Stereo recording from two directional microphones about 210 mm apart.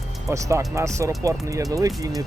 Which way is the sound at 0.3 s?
15° right (ahead or behind).